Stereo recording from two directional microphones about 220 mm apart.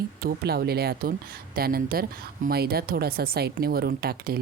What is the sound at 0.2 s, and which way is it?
A woman's voice, 45° right (ahead or behind).